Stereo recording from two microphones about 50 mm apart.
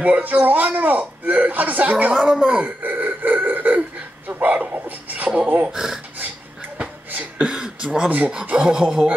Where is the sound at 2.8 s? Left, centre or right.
Right.